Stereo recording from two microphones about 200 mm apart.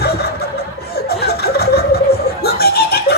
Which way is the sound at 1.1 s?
50° left (ahead or behind).